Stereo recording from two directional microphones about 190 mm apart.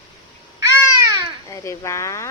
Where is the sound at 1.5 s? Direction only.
15° left (ahead or behind).